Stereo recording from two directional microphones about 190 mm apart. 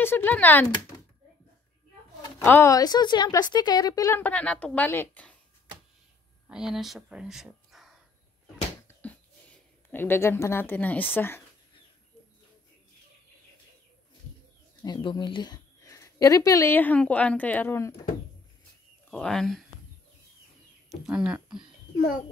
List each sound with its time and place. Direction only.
0.0 s speech: 10° left (ahead or behind)
2.2 s a woman's voice: 15° left (ahead or behind)
6.5 s speech: 5° right (ahead or behind)
8.8 s a sound: 10° left (ahead or behind)
9.8 s a woman's voice: 10° left (ahead or behind)
14.8 s speech: 25° left (ahead or behind)
19.0 s speech: 5° left (ahead or behind)
20.9 s speech: 5° right (ahead or behind)